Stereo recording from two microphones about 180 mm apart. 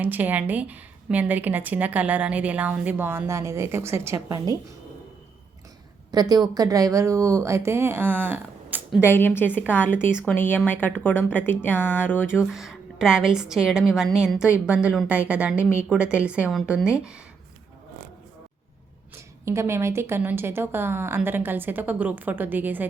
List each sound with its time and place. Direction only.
0.0 s a woman's voice: 10° right (ahead or behind)
6.1 s a woman's voice: 20° right (ahead or behind)
9.0 s speech: 10° left (ahead or behind)
12.5 s a woman's voice: centre (ahead or behind)
19.5 s a woman's voice: 15° right (ahead or behind)